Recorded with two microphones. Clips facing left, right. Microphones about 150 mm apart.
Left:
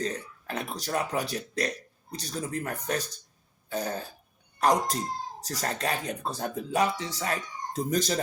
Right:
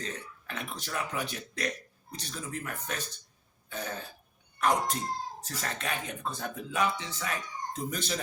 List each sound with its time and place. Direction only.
0.0 s speech: 40° left (ahead or behind)
3.7 s throat clearing: 40° left (ahead or behind)
4.5 s speech: 35° left (ahead or behind)